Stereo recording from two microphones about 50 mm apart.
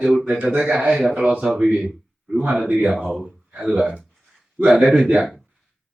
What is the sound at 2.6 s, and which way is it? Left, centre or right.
Speech, right.